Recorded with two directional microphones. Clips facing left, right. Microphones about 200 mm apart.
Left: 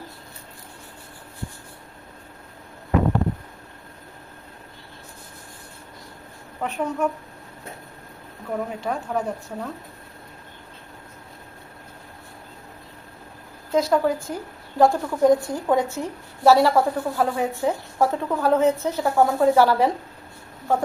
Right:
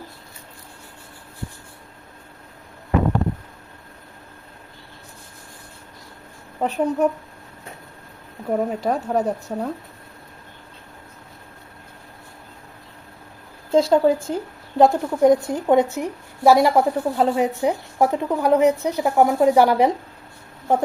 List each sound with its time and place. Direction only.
6.6 s speech: 35° right (ahead or behind)
8.4 s speech: 40° right (ahead or behind)
13.7 s a woman's voice: 30° right (ahead or behind)